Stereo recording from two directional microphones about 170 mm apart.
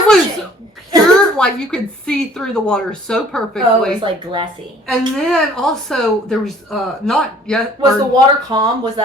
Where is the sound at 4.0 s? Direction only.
30° right (ahead or behind).